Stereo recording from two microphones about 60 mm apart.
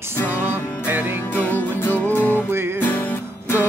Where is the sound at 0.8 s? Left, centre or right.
Right.